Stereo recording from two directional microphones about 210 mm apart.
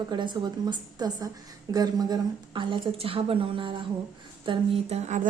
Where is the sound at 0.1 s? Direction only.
20° right (ahead or behind).